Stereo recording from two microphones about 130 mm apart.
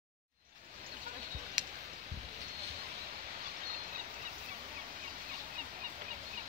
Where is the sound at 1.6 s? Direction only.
30° right (ahead or behind).